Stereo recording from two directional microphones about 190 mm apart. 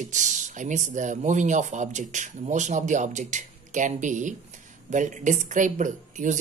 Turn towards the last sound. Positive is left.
turn(degrees=-40)  # may be behind; listen again after turning